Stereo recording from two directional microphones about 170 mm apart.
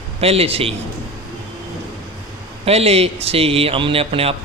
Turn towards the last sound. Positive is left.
turn(degrees=-35)  # may be behind; listen again after turning